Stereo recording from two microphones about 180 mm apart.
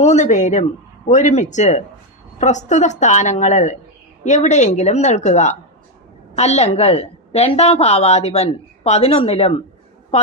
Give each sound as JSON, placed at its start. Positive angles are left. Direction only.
{"t": 0.0, "sound": "a woman's voice", "side_deg": 40}